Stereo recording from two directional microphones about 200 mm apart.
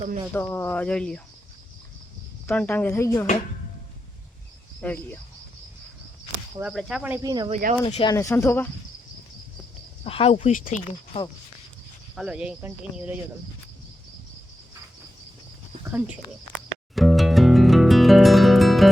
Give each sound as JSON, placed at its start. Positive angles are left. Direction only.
{"t": 0.3, "sound": "speech", "side_deg": 10}
{"t": 2.5, "sound": "speech", "side_deg": 5}
{"t": 4.8, "sound": "speech", "side_deg": 5}
{"t": 6.7, "sound": "speech", "side_deg": 0}
{"t": 7.5, "sound": "speech", "side_deg": -35}
{"t": 7.9, "sound": "speech", "side_deg": 30}
{"t": 8.1, "sound": "speech", "side_deg": 15}
{"t": 10.0, "sound": "speech", "side_deg": 30}
{"t": 12.1, "sound": "speech", "side_deg": -5}
{"t": 15.8, "sound": "speech", "side_deg": -5}
{"t": 16.9, "sound": "music", "side_deg": 0}